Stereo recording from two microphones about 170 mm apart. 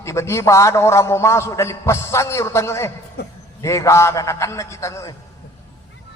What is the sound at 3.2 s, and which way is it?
Speech, 70° left (ahead or behind).